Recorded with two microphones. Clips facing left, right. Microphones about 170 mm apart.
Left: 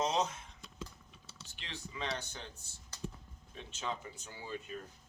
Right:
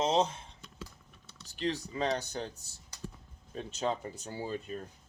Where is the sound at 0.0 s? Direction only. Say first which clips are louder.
Right 5 dB; 30° right (ahead or behind).